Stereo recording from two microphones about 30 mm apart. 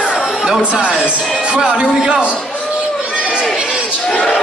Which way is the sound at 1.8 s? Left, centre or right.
Right.